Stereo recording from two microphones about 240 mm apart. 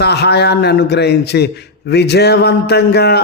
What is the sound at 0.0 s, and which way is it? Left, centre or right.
Speech, left.